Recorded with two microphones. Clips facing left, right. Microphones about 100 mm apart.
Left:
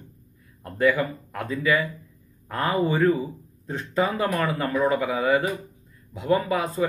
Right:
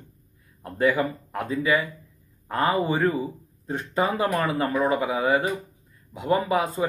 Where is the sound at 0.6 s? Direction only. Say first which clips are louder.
Left 1 dB; 25° right (ahead or behind).